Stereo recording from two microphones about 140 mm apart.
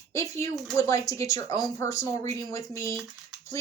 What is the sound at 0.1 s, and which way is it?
Speech, 20° left (ahead or behind).